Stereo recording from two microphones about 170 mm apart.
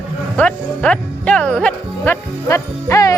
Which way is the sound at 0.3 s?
5° left (ahead or behind).